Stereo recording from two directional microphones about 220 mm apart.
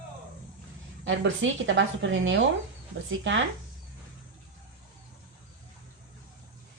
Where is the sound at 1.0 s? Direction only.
60° right (ahead or behind).